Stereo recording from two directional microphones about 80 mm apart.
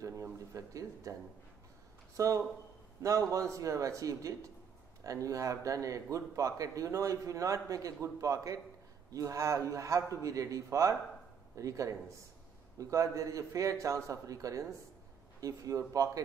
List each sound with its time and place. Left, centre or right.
0.0 s speech: right
2.1 s speech: right